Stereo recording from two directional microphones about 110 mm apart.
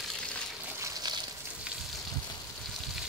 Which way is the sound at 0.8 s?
35° right (ahead or behind).